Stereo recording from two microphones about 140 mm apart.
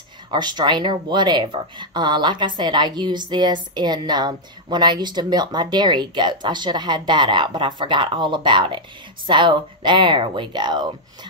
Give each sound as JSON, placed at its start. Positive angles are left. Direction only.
{"t": 0.3, "sound": "speech", "side_deg": -30}